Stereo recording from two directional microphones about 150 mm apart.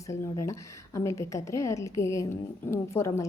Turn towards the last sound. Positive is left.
turn(degrees=20)  # may be behind; listen again after turning